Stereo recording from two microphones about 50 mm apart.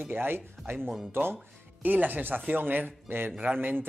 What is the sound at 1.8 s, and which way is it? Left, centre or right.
Speech, right.